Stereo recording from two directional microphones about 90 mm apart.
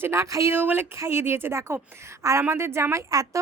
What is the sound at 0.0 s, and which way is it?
Speech, 30° right (ahead or behind).